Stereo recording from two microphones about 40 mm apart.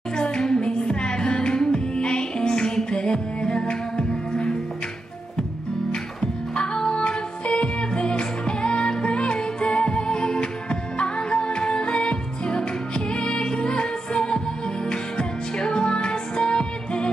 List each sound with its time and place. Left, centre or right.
0.2 s music: left
6.5 s music: centre